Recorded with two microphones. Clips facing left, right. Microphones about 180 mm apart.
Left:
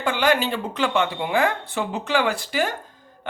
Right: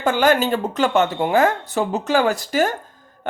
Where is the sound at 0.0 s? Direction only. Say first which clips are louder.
Right 4 dB; 45° right (ahead or behind).